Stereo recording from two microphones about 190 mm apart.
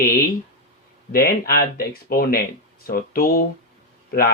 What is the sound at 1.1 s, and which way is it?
Speech, 55° left (ahead or behind).